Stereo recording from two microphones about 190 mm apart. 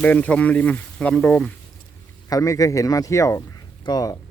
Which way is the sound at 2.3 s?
20° left (ahead or behind).